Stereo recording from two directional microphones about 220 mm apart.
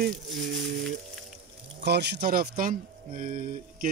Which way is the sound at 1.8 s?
50° right (ahead or behind).